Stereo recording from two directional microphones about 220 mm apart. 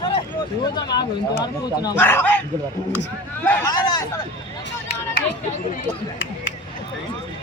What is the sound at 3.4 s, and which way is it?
Speech, 15° left (ahead or behind).